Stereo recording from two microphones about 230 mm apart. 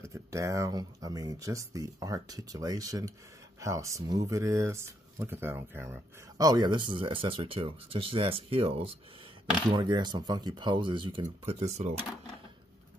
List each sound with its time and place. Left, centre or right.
0.0 s speech: centre; by 11.9 s right